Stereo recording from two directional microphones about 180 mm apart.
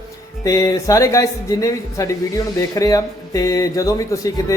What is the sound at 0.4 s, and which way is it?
Speech, 20° left (ahead or behind).